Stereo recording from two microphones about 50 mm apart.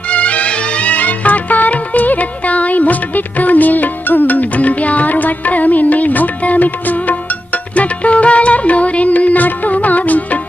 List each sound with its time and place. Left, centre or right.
0.1 s music: left